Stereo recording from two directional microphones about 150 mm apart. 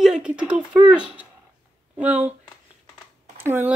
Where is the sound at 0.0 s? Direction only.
5° right (ahead or behind).